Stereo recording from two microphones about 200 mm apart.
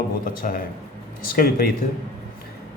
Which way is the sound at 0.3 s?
45° left (ahead or behind).